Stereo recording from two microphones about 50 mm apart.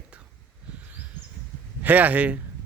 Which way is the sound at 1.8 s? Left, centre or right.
Right.